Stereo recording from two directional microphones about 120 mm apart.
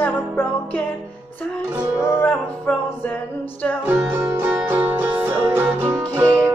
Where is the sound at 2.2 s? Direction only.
10° left (ahead or behind).